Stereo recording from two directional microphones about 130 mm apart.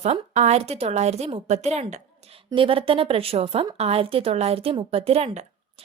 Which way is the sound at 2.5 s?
45° right (ahead or behind).